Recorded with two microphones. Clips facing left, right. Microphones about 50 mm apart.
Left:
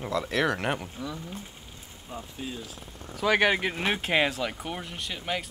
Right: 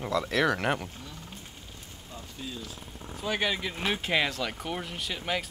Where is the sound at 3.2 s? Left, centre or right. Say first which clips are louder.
Left 7 dB; left.